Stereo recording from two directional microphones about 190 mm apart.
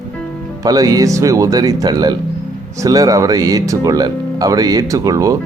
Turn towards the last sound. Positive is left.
turn(degrees=-20)  # may be behind; listen again after turning